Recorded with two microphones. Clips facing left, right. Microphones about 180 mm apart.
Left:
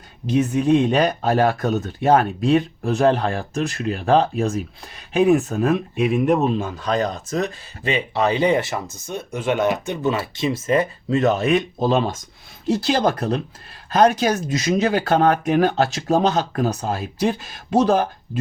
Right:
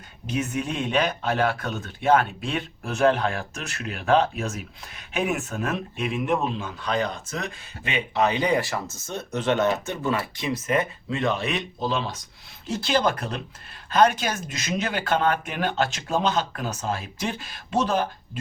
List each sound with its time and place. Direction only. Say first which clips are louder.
0.3 s speech: left 10 dB; 35° left (ahead or behind)
12.6 s speech: left 4 dB; 40° left (ahead or behind)